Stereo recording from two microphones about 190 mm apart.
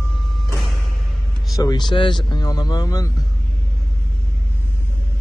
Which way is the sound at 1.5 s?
20° left (ahead or behind).